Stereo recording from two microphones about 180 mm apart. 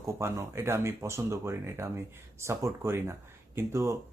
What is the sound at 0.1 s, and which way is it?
Speech, 15° right (ahead or behind).